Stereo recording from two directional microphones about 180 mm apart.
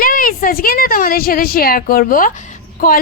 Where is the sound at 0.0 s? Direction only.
50° left (ahead or behind).